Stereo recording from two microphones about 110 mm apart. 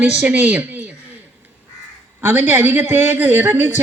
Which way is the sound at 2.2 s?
15° right (ahead or behind).